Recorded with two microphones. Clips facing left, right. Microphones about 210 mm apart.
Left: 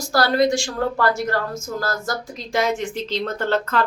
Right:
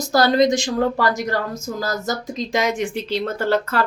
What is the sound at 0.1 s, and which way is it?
Speech, 20° right (ahead or behind).